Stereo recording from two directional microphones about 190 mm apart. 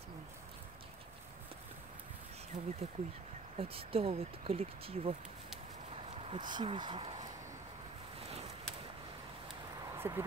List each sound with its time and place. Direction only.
2.5 s speech: 25° right (ahead or behind)
6.3 s speech: 25° right (ahead or behind)
9.9 s a sound: 10° right (ahead or behind)